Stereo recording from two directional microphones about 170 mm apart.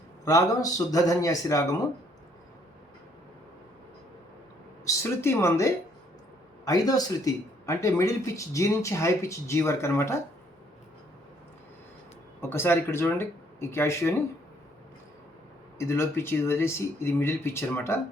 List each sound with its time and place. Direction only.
0.3 s speech: 20° left (ahead or behind)
4.9 s speech: 15° left (ahead or behind)
12.4 s speech: 15° left (ahead or behind)
15.8 s speech: 15° left (ahead or behind)